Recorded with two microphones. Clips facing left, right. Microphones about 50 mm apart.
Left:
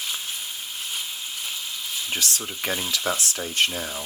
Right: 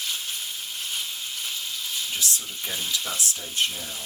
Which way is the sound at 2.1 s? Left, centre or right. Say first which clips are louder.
Left 2 dB; left.